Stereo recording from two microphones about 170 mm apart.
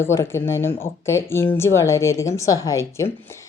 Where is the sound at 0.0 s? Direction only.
15° left (ahead or behind).